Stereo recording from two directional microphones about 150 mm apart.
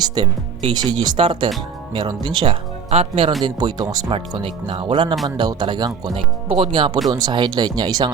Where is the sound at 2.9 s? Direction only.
45° right (ahead or behind).